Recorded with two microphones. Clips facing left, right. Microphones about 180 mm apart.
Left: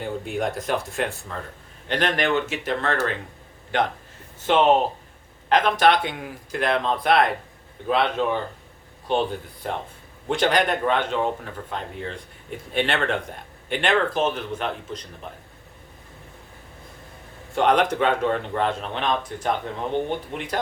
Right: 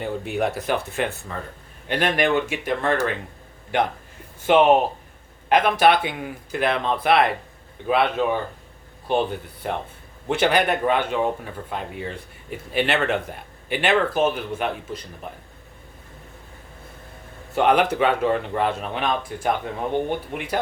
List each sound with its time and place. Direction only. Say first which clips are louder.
0.0 s a man's voice: right 2 dB; centre (ahead or behind)
4.4 s a man's voice: right 2 dB; 10° right (ahead or behind)
17.5 s a man's voice: right 1 dB; 5° right (ahead or behind)